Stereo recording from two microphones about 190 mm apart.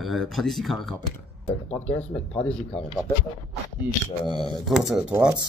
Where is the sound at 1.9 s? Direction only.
35° left (ahead or behind).